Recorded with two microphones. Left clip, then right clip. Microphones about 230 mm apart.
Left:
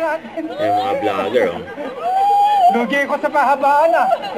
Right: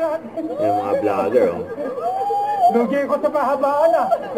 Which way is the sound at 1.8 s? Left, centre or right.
Left.